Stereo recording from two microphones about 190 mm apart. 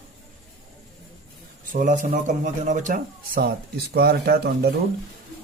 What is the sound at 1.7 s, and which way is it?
Speech, 45° right (ahead or behind).